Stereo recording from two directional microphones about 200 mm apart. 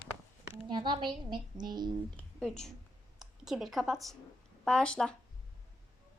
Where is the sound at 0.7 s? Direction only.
20° right (ahead or behind).